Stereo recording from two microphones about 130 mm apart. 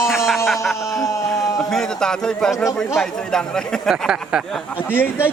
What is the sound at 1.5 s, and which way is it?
A man's voice, 5° left (ahead or behind).